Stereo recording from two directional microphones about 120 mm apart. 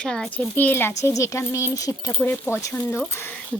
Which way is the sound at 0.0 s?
5° left (ahead or behind).